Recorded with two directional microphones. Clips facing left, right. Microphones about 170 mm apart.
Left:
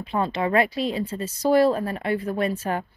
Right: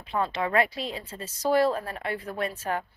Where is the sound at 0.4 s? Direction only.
20° left (ahead or behind).